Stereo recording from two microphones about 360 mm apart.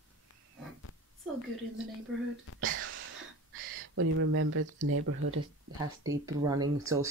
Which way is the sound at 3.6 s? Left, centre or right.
Right.